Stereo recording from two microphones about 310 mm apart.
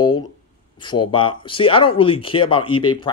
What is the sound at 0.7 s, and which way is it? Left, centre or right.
Speech, centre.